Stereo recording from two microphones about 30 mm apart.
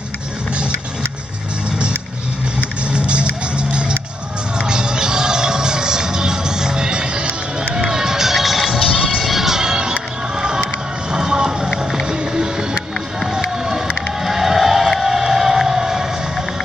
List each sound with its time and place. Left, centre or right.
2.9 s music: right
7.9 s run: centre
8.7 s music: centre
9.2 s music: centre
9.6 s music: right
11.1 s music: right
11.7 s music: centre
12.1 s music: right
13.3 s run: centre
14.2 s a sound: centre
14.9 s music: centre